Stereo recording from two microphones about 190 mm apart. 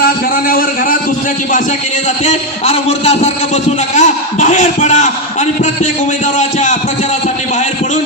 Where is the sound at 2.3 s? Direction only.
35° left (ahead or behind).